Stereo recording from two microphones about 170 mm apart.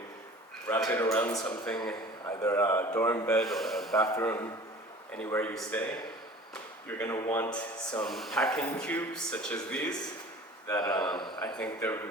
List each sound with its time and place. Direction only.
0.9 s speech: 15° left (ahead or behind)
2.2 s speech: 15° left (ahead or behind); by 4.0 s centre (ahead or behind)
4.0 s speech: 15° left (ahead or behind)
10.7 s speech: 25° left (ahead or behind)
11.5 s speech: 10° left (ahead or behind)